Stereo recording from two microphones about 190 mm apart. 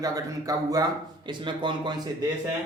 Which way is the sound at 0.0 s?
20° right (ahead or behind).